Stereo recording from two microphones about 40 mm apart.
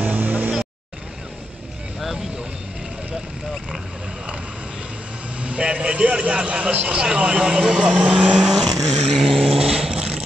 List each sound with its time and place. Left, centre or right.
0.0 s vehicle: right
5.4 s speech: right
8.4 s vehicle: centre
9.4 s dog: right
9.9 s a sound: right